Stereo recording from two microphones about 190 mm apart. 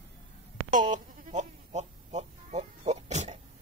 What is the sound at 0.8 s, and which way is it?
Sheep, 40° right (ahead or behind).